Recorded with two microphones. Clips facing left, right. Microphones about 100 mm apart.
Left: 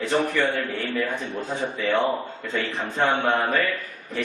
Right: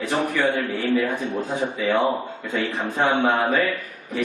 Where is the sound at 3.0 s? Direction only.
10° right (ahead or behind).